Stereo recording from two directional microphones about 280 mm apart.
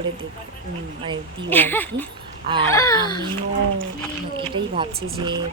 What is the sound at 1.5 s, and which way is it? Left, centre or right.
Speech, centre.